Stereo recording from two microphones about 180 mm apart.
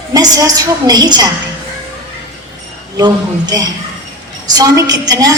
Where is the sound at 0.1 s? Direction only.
20° right (ahead or behind).